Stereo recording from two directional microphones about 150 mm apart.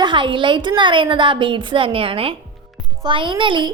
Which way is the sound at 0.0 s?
35° right (ahead or behind).